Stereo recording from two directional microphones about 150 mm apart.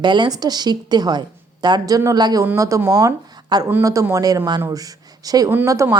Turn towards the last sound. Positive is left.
turn(degrees=-20)  # may be behind; listen again after turning